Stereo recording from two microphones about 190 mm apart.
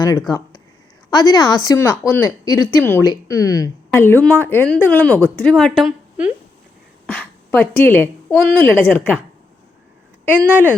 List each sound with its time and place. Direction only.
0.0 s a woman's voice: 20° left (ahead or behind); by 6.3 s 5° right (ahead or behind)
7.1 s a woman's voice: 5° left (ahead or behind)
10.2 s speech: 10° right (ahead or behind)